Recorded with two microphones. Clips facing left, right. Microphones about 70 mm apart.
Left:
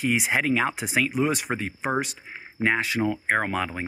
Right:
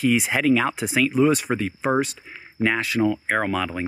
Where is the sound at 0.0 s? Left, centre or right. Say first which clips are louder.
Right 4 dB; left.